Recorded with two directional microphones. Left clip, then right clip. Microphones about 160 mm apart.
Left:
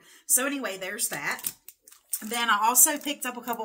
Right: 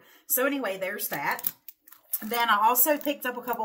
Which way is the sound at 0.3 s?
30° left (ahead or behind).